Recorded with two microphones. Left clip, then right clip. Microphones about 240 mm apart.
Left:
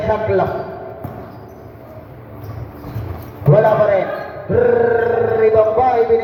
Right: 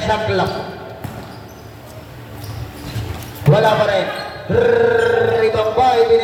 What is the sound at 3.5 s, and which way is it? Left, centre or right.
A man's voice, right.